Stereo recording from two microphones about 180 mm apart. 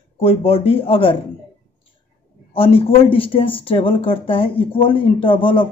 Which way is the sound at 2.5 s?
30° left (ahead or behind).